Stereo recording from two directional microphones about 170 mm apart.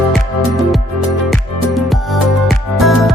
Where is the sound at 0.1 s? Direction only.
Centre (ahead or behind).